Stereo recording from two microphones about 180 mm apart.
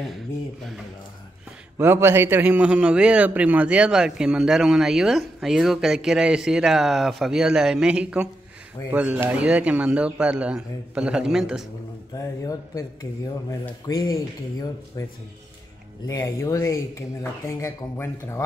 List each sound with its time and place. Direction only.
1.8 s a man's voice: 15° right (ahead or behind)
12.2 s speech: 20° left (ahead or behind)